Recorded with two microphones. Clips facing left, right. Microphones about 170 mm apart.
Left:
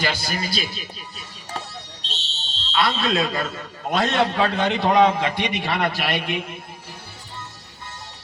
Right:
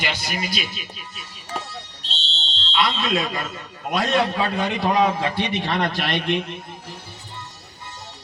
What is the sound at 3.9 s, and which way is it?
A man's voice, 25° left (ahead or behind).